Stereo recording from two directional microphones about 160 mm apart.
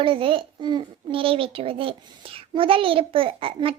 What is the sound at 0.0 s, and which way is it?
A child's voice, 35° right (ahead or behind).